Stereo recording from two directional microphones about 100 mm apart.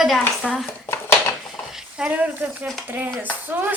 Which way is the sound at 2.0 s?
15° right (ahead or behind).